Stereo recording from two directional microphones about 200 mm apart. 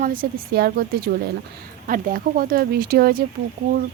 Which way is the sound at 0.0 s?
45° right (ahead or behind).